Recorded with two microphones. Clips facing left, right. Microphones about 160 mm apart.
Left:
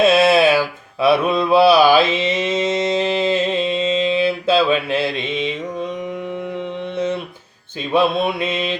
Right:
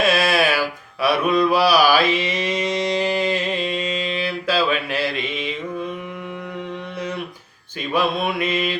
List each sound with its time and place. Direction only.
0.0 s a sound: 25° left (ahead or behind)
1.0 s mantra: 25° left (ahead or behind)
7.9 s mantra: 25° left (ahead or behind)